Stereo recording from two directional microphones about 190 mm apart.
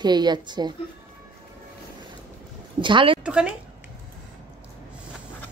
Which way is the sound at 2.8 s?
25° right (ahead or behind).